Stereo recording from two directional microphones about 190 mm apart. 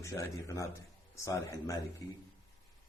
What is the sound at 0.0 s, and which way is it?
A man's voice, 15° left (ahead or behind).